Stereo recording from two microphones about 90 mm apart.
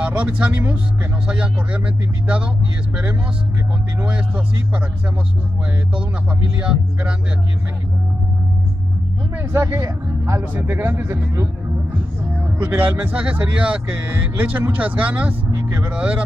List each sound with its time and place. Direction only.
0.0 s speech: 15° right (ahead or behind)
6.6 s speech: 10° right (ahead or behind)
9.4 s speech: 30° right (ahead or behind)
10.5 s speech: 20° right (ahead or behind)
12.5 s speech: 15° right (ahead or behind)